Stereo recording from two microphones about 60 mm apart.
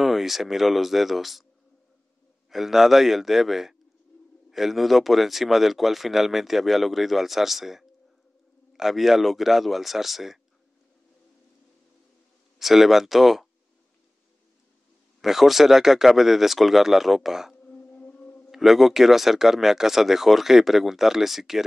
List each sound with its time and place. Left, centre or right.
0.0 s speech: centre
2.5 s speech: centre
12.5 s speech: centre
15.2 s speech: centre
17.9 s a sound: left
18.5 s speech: centre